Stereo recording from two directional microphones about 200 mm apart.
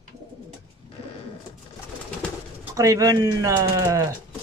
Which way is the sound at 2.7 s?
15° right (ahead or behind).